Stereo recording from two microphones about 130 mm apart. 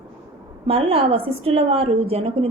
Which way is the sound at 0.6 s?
50° right (ahead or behind).